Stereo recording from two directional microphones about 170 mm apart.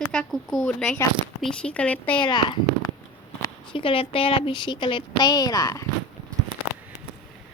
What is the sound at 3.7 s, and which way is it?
A woman's voice, 30° left (ahead or behind).